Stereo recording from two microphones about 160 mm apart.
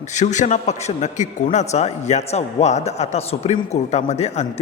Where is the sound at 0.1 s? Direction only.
50° left (ahead or behind).